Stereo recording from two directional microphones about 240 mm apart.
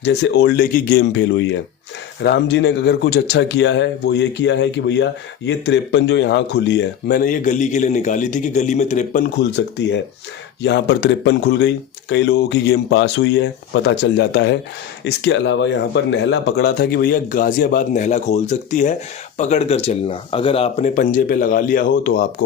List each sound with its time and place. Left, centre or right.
0.0 s speech: left
9.4 s speech: left